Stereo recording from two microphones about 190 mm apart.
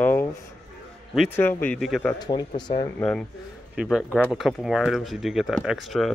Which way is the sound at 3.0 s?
5° left (ahead or behind).